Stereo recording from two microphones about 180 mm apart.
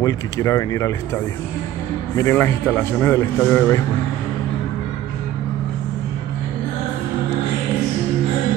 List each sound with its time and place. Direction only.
0.0 s speech: 20° left (ahead or behind)
2.1 s a man's voice: 15° left (ahead or behind)